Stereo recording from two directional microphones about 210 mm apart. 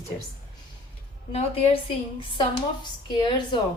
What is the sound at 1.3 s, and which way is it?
Speech, 30° left (ahead or behind).